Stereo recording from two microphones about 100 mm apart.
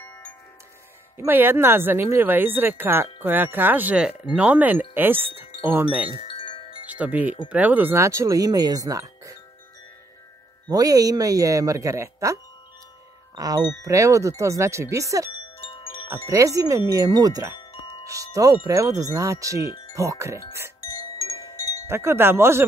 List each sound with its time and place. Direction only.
1.1 s speech: 20° right (ahead or behind)
6.2 s chime: 60° left (ahead or behind)
6.9 s speech: 15° right (ahead or behind)
8.0 s speech: 30° right (ahead or behind)
10.7 s speech: 40° right (ahead or behind)
13.4 s speech: 40° right (ahead or behind)
21.0 s wind chime: 30° left (ahead or behind)
21.8 s speech: 25° right (ahead or behind)